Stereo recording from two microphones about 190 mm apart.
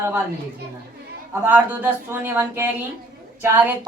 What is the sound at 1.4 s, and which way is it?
Speech, 10° right (ahead or behind).